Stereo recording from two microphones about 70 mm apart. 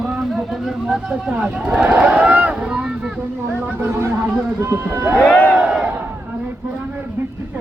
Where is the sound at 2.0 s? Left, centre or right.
Centre.